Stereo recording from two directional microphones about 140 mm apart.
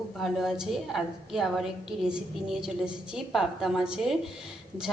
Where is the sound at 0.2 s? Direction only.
5° right (ahead or behind).